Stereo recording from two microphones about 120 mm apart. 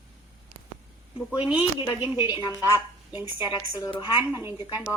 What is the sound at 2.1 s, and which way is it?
Speech, 35° left (ahead or behind).